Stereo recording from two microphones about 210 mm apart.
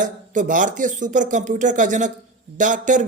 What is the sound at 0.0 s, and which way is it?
Speech, 40° right (ahead or behind).